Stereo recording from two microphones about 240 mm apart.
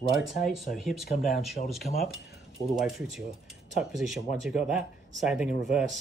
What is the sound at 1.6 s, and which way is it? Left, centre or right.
Speech, left.